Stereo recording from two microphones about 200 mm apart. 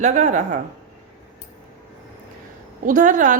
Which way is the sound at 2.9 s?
40° right (ahead or behind).